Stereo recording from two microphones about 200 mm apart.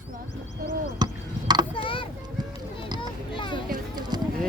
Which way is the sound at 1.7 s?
25° left (ahead or behind).